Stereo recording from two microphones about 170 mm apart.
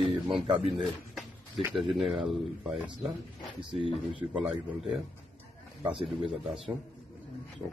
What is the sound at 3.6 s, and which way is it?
Speech, 30° right (ahead or behind).